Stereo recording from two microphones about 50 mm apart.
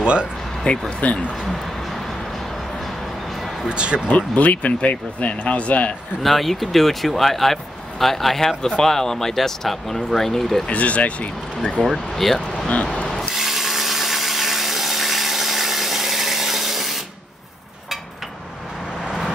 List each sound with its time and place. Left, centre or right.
0.0 s speech: right
0.7 s speech: left
3.6 s speech: centre
4.1 s speech: left
6.2 s speech: centre
10.7 s speech: left
11.8 s speech: centre
12.6 s vehicle: left
13.3 s tools: centre